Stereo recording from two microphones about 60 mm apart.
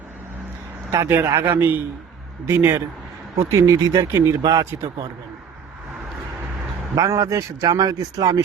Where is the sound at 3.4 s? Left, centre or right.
Right.